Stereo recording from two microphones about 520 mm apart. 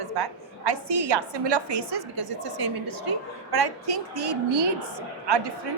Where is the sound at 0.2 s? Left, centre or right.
Right.